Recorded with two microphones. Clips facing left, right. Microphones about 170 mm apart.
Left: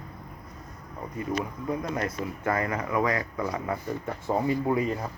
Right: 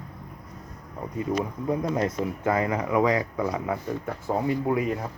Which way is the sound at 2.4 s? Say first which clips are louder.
Right 3 dB; 15° right (ahead or behind).